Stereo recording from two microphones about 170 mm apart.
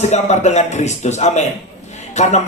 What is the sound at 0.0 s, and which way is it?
A man's voice, 40° left (ahead or behind).